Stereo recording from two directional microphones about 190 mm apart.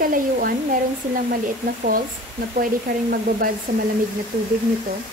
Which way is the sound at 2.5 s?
50° right (ahead or behind).